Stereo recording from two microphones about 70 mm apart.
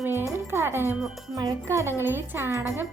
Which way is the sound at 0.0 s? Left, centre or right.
Right.